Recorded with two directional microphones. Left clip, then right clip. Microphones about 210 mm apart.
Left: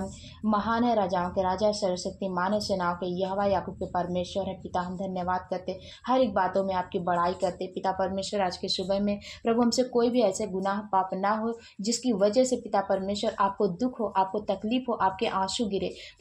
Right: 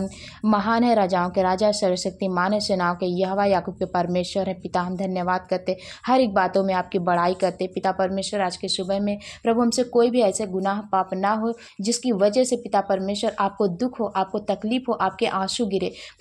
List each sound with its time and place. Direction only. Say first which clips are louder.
0.5 s a woman's voice: right 6 dB; 30° right (ahead or behind)